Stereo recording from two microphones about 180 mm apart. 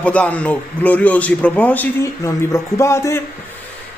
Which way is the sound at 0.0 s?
5° left (ahead or behind).